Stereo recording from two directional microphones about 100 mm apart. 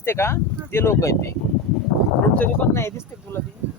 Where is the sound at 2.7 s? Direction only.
25° left (ahead or behind).